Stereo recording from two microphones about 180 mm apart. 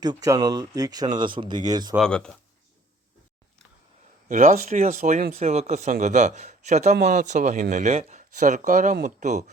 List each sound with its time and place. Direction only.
0.0 s speech: 20° right (ahead or behind)
2.0 s speech: 5° left (ahead or behind)
4.3 s speech: 45° right (ahead or behind)